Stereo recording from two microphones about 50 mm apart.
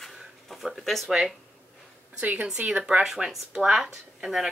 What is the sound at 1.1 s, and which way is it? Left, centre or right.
Speech, centre.